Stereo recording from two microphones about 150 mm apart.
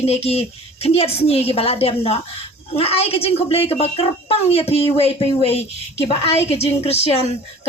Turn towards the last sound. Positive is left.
turn(degrees=45)  # may be behind; listen again after turning